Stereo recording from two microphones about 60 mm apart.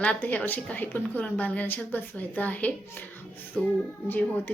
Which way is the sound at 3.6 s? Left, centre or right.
Centre.